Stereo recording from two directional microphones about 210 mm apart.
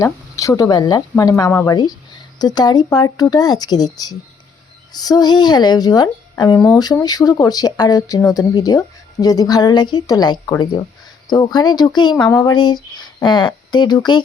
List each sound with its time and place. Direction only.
0.0 s speech: 15° left (ahead or behind)